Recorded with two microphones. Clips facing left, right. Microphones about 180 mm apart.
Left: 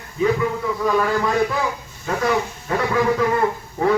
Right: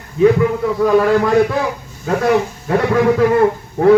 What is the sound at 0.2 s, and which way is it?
A man's voice, 55° right (ahead or behind).